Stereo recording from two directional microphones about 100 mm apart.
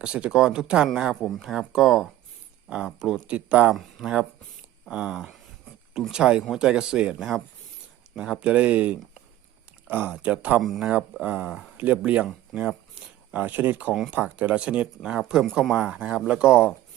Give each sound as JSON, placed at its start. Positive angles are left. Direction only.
{"t": 0.0, "sound": "speech", "side_deg": -10}
{"t": 9.8, "sound": "a sound", "side_deg": -20}
{"t": 10.2, "sound": "speech", "side_deg": -15}
{"t": 10.6, "sound": "speech", "side_deg": 0}
{"t": 15.4, "sound": "speech", "side_deg": 0}
{"t": 15.7, "sound": "speech", "side_deg": -10}